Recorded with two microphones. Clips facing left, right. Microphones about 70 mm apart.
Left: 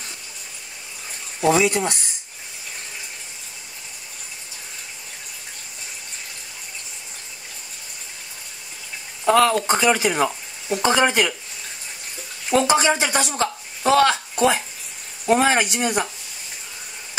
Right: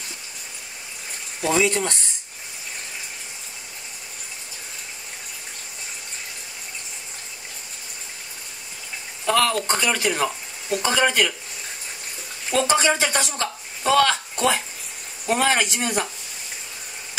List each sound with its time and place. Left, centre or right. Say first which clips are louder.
1.4 s speech: left 3 dB; centre
9.2 s speech: left 4 dB; left
12.4 s speech: left 2 dB; centre